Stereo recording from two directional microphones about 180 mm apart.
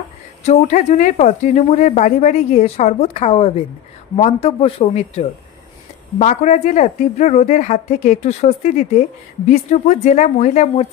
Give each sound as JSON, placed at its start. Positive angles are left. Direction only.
{"t": 0.4, "sound": "speech", "side_deg": 40}